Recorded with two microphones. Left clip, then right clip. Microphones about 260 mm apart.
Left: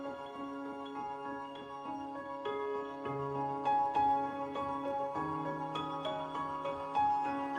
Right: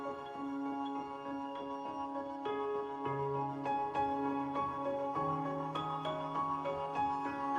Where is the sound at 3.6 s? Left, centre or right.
Centre.